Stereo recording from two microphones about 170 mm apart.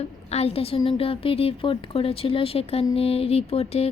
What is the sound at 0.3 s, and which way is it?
Speech, 35° left (ahead or behind).